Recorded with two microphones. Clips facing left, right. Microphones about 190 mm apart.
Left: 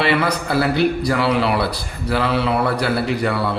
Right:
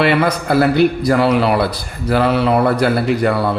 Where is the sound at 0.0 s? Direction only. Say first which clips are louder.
Right 4 dB; 50° right (ahead or behind).